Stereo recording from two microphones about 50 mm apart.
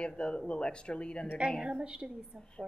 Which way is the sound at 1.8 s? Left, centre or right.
Right.